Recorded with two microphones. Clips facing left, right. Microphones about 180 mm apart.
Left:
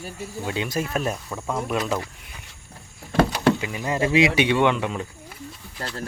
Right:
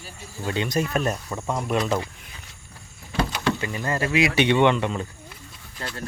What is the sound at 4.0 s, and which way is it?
Speech, 25° left (ahead or behind).